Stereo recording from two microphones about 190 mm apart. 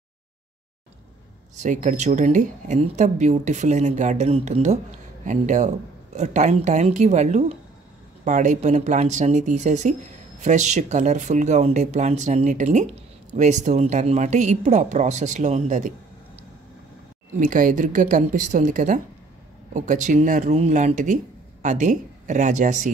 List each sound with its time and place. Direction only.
1.6 s speech: 40° right (ahead or behind)
17.4 s speech: 45° right (ahead or behind)